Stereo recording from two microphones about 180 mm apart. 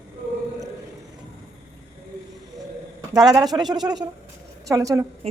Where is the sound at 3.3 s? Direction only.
Centre (ahead or behind).